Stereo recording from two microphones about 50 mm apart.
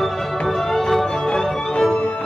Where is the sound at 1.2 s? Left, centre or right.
Centre.